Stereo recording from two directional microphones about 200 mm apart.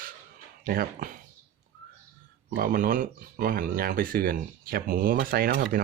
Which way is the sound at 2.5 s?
45° right (ahead or behind).